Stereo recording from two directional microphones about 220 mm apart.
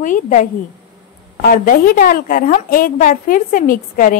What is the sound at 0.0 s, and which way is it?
A woman's voice, 35° left (ahead or behind).